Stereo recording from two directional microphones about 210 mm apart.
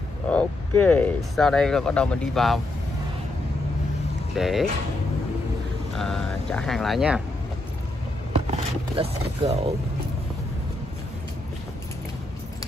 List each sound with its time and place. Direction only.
0.3 s speech: 5° left (ahead or behind)
4.4 s speech: centre (ahead or behind)
5.9 s speech: centre (ahead or behind)
8.3 s speech: 25° right (ahead or behind)